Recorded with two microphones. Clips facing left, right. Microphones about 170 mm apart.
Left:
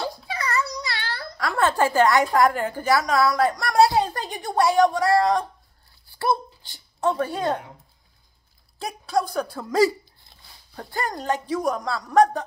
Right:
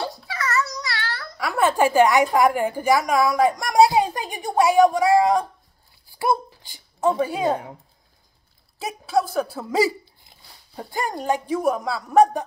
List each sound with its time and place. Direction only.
0.6 s a sound: 25° left (ahead or behind)
1.4 s a woman's voice: 10° right (ahead or behind)
8.7 s speech: 5° right (ahead or behind)